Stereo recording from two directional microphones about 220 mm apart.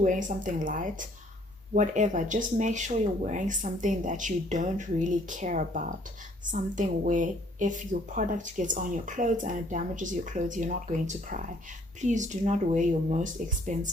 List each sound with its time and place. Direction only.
0.0 s a woman's voice: 35° right (ahead or behind)